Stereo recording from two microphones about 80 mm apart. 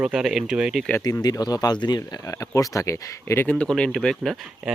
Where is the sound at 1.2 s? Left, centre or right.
Left.